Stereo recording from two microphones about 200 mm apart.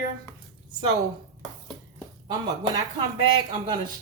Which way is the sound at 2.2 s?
20° right (ahead or behind).